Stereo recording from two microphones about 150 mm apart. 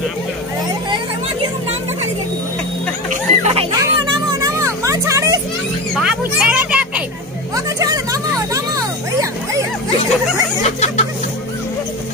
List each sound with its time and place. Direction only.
3.1 s music: 45° right (ahead or behind)
3.7 s music: 25° right (ahead or behind)
5.9 s a sound: 5° right (ahead or behind)
7.5 s music: 25° right (ahead or behind)
10.6 s music: 50° left (ahead or behind)